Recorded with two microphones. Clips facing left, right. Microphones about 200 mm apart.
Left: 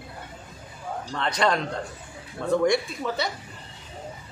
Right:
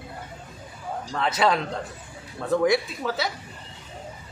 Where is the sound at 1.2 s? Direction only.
5° right (ahead or behind).